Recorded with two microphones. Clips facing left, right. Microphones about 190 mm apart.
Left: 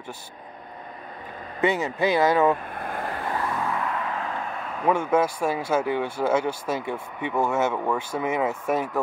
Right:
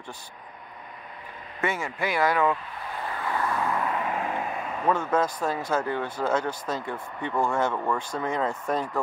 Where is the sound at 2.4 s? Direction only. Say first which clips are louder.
Left 4 dB; 50° left (ahead or behind).